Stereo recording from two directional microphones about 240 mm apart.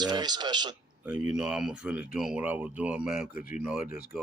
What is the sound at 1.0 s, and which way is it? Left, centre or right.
Speech, centre.